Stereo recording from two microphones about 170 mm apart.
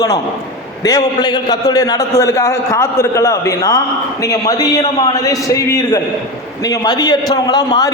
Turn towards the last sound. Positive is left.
turn(degrees=20)  # may be behind; listen again after turning